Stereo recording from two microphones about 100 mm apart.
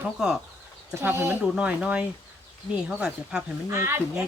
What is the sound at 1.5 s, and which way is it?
Speech, 10° right (ahead or behind).